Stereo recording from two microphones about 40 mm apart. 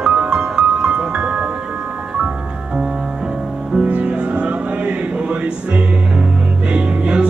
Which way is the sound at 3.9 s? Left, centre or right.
Right.